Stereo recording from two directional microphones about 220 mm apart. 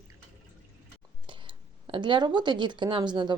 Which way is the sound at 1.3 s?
20° right (ahead or behind).